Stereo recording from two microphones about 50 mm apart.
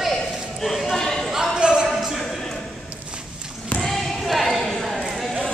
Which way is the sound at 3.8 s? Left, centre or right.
Centre.